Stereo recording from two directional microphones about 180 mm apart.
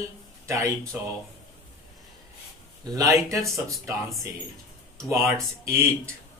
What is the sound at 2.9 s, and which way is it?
Speech, 20° right (ahead or behind).